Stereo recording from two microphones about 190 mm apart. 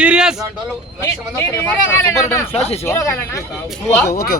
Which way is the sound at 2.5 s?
35° left (ahead or behind).